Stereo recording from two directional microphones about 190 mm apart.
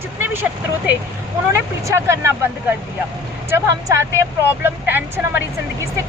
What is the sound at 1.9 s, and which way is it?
Speech, 15° right (ahead or behind).